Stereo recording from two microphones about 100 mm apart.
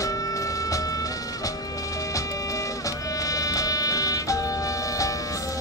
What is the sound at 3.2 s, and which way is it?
Music, 35° left (ahead or behind).